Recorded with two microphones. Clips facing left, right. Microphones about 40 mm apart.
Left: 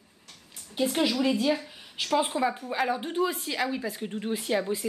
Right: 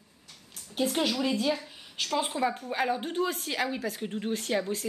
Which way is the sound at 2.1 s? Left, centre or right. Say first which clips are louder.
Left 3 dB; centre.